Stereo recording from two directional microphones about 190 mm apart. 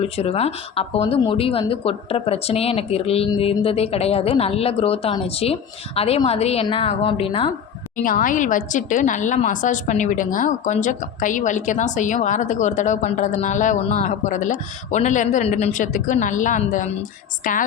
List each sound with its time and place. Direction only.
0.0 s a woman's voice: 35° left (ahead or behind)
8.0 s a woman's voice: 45° left (ahead or behind)